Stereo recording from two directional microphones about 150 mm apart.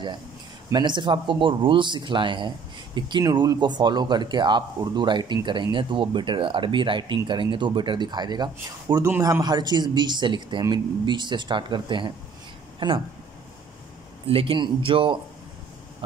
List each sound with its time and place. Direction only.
0.7 s a man's voice: 30° right (ahead or behind)
9.0 s a man's voice: 15° right (ahead or behind); by 13.0 s 35° right (ahead or behind)
14.2 s a man's voice: 35° right (ahead or behind)